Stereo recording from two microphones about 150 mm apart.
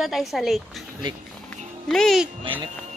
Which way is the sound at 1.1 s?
30° right (ahead or behind).